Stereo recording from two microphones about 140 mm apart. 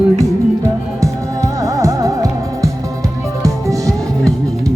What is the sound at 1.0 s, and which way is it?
Music, 20° right (ahead or behind).